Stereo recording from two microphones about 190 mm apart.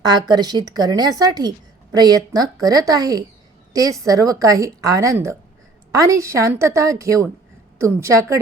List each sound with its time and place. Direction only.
0.0 s a woman's voice: 20° right (ahead or behind)